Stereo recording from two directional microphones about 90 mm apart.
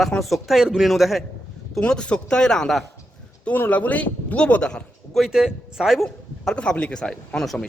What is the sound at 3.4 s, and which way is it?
Speech, 20° left (ahead or behind).